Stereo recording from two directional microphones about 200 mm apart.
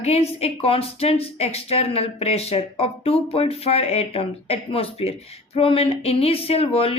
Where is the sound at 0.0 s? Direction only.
30° left (ahead or behind).